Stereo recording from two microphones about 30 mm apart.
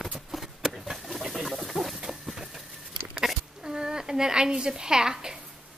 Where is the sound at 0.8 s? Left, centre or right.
Centre.